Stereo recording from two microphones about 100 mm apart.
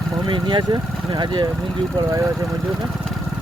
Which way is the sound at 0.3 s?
50° right (ahead or behind).